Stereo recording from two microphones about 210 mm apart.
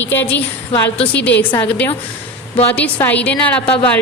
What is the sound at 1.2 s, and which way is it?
Speech, 55° left (ahead or behind).